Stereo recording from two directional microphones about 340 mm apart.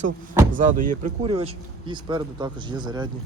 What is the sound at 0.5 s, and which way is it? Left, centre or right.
Speech, right.